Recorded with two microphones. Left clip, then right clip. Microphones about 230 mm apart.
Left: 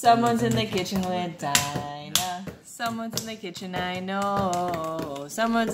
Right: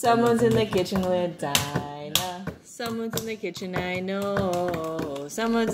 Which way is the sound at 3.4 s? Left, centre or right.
Centre.